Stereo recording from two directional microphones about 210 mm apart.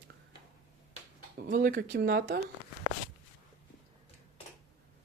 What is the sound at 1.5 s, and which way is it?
Speech, 40° right (ahead or behind).